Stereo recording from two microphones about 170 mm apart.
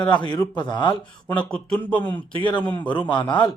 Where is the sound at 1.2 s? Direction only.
5° left (ahead or behind).